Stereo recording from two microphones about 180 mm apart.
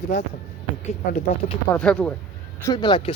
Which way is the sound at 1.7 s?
5° left (ahead or behind).